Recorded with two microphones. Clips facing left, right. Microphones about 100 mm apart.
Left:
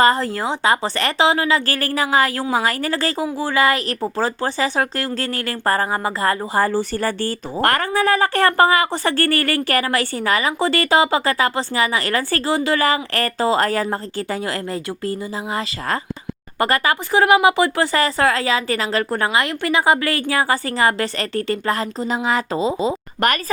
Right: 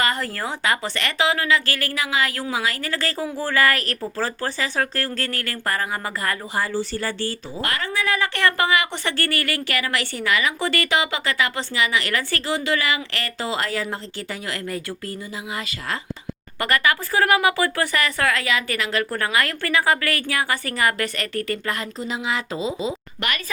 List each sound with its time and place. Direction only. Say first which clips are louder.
0.0 s speech: left 8 dB; 35° left (ahead or behind)
3.3 s speech: left 2 dB; 20° left (ahead or behind)
6.6 s speech: left 5 dB; 50° left (ahead or behind)